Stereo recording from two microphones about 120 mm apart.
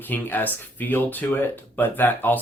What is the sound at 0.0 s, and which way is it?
Speech, 15° left (ahead or behind).